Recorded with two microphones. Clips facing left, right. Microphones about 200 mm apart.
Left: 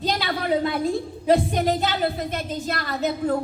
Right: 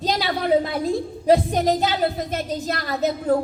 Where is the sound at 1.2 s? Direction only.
40° right (ahead or behind).